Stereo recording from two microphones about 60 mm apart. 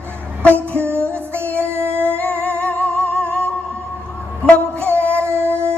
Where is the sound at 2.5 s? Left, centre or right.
Left.